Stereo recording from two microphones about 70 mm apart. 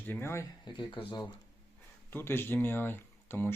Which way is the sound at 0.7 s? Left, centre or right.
Left.